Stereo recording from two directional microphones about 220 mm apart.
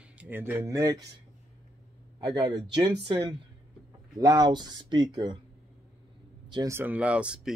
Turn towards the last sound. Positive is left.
turn(degrees=-5)  # may be behind; listen again after turning